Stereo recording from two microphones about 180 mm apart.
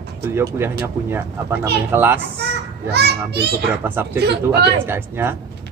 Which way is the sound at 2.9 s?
65° right (ahead or behind).